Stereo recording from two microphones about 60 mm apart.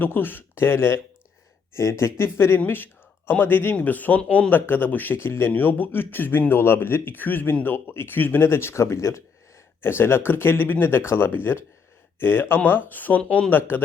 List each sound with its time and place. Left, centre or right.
0.0 s speech: left
2.6 s a man's voice: left
9.8 s a man's voice: left